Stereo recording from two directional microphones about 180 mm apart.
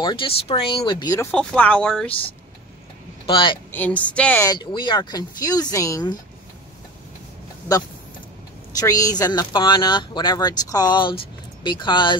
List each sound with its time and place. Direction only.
0.0 s speech: 25° left (ahead or behind)
1.3 s speech: 5° left (ahead or behind)
3.3 s speech: 25° left (ahead or behind)
3.7 s a woman's voice: 10° left (ahead or behind)
4.5 s speech: 25° left (ahead or behind)
8.7 s speech: 20° left (ahead or behind)